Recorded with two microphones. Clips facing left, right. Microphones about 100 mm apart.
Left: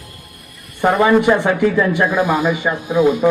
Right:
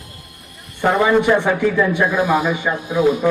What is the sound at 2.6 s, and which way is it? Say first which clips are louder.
Speech: left 3 dB; 20° left (ahead or behind).